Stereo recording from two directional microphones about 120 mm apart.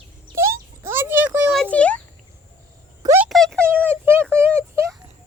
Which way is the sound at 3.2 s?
Centre (ahead or behind).